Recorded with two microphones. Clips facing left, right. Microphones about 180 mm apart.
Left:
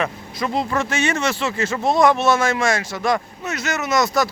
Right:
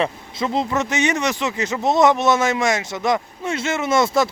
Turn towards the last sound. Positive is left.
turn(degrees=-25)  # may be behind; listen again after turning